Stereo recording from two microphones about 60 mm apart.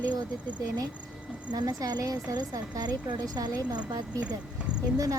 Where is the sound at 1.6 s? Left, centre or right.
Right.